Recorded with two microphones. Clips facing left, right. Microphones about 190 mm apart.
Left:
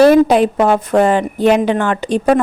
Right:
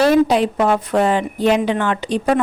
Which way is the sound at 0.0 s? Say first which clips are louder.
Left 5 dB; 55° left (ahead or behind).